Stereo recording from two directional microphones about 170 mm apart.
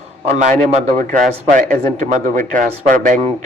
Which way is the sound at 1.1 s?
50° right (ahead or behind).